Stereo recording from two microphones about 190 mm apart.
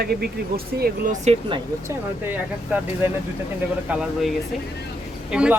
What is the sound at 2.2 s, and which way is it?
Speech, 10° right (ahead or behind).